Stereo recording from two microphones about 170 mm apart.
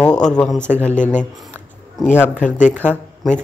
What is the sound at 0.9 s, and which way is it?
Speech, 45° left (ahead or behind).